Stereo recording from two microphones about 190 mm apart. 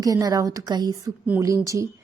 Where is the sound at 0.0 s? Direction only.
20° right (ahead or behind).